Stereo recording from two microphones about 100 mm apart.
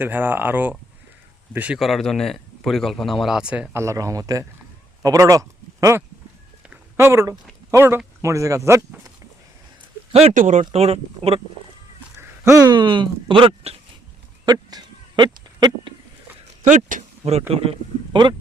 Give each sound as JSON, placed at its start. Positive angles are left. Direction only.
{"t": 0.0, "sound": "speech", "side_deg": -20}
{"t": 1.8, "sound": "speech", "side_deg": 0}
{"t": 3.8, "sound": "speech", "side_deg": -30}
{"t": 10.1, "sound": "speech", "side_deg": -85}
{"t": 12.6, "sound": "speech", "side_deg": -50}
{"t": 14.4, "sound": "a sound", "side_deg": -45}
{"t": 17.2, "sound": "speech", "side_deg": -90}
{"t": 18.1, "sound": "speech", "side_deg": -50}